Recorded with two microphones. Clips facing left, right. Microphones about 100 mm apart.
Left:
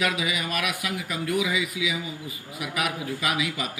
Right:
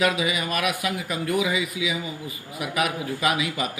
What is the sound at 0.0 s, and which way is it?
Speech, 35° right (ahead or behind).